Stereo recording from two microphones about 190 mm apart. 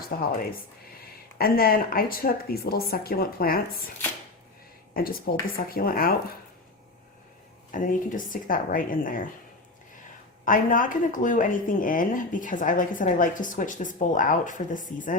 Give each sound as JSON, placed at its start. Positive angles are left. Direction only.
{"t": 0.0, "sound": "speech", "side_deg": 50}
{"t": 1.4, "sound": "speech", "side_deg": 50}
{"t": 4.9, "sound": "speech", "side_deg": 50}
{"t": 7.7, "sound": "speech", "side_deg": 45}
{"t": 10.4, "sound": "speech", "side_deg": 45}